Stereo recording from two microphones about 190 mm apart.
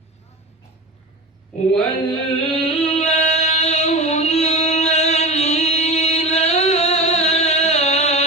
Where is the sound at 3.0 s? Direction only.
35° left (ahead or behind).